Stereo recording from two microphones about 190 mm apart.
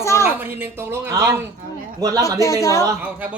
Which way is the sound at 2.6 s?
15° left (ahead or behind).